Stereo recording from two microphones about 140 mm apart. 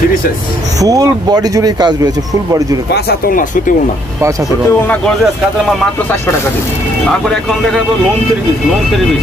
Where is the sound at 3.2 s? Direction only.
85° left.